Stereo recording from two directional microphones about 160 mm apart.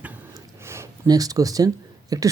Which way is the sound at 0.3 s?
15° right (ahead or behind).